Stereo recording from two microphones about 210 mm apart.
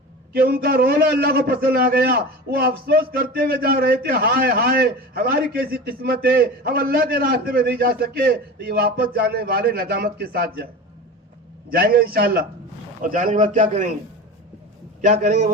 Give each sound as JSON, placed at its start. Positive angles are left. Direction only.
{"t": 0.3, "sound": "a man's voice", "side_deg": -45}
{"t": 11.7, "sound": "a man's voice", "side_deg": -45}
{"t": 15.0, "sound": "a man's voice", "side_deg": -35}